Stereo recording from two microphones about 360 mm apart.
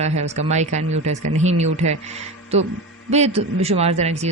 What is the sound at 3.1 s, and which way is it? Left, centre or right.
Speech, centre.